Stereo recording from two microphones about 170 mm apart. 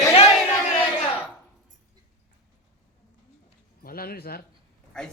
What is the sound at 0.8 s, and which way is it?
Battle cry, 10° left (ahead or behind).